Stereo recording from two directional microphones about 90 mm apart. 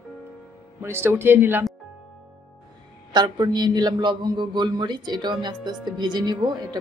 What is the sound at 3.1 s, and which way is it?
A man's voice, 50° right (ahead or behind).